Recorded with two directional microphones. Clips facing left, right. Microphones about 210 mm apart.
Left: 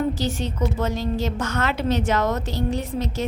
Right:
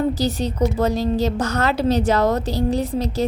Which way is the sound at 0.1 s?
40° right (ahead or behind).